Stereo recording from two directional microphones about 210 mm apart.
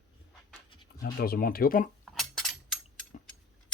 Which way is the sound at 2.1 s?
Centre (ahead or behind).